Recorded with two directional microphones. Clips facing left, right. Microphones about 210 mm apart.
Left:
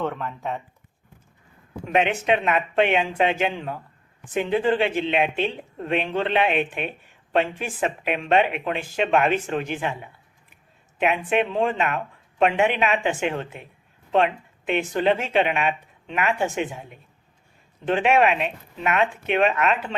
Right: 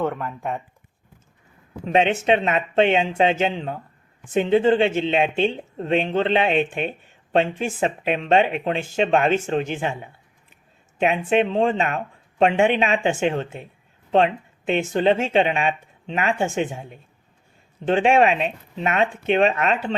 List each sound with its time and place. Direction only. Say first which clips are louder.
0.0 s speech: right 3 dB; 10° right (ahead or behind)
1.9 s speech: right 3 dB; 25° right (ahead or behind)